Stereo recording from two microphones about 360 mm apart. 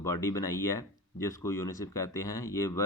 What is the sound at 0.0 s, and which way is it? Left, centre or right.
Speech, centre.